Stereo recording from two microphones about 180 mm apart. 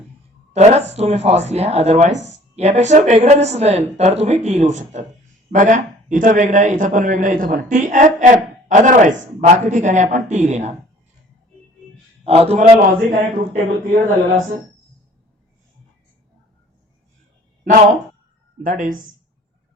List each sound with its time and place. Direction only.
0.5 s a man's voice: 40° right (ahead or behind)
12.2 s a man's voice: 35° right (ahead or behind)
18.6 s a man's voice: 45° right (ahead or behind)